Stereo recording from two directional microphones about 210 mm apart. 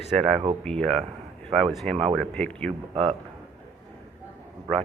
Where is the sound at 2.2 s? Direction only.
5° left (ahead or behind).